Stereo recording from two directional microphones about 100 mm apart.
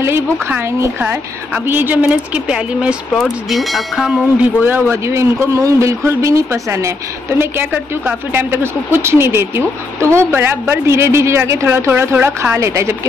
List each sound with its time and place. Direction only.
0.5 s a woman's voice: 25° right (ahead or behind); by 4.2 s centre (ahead or behind)
4.4 s a woman's voice: 20° right (ahead or behind)
7.3 s a woman's voice: 20° right (ahead or behind)